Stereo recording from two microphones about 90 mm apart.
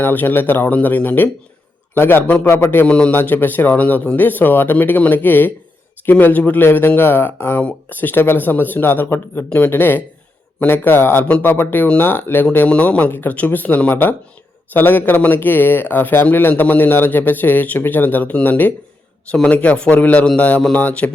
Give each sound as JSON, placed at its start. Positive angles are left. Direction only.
{"t": 0.0, "sound": "a man's voice", "side_deg": 20}
{"t": 2.8, "sound": "a man's voice", "side_deg": 15}